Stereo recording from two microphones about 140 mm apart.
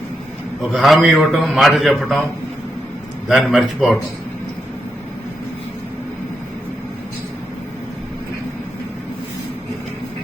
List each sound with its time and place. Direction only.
0.7 s a man's voice: 5° right (ahead or behind)
3.2 s a man's voice: centre (ahead or behind)